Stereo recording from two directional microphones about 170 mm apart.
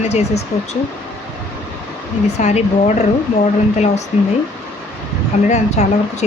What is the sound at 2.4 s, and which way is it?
Speech, 40° left (ahead or behind).